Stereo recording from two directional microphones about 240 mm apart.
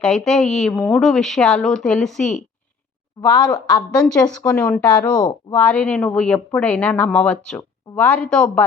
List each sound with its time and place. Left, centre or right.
0.0 s speech: centre
3.2 s speech: centre
3.9 s speech: centre
5.1 s speech: centre
5.5 s speech: centre